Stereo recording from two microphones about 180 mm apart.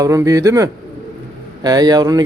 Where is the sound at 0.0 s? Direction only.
20° right (ahead or behind).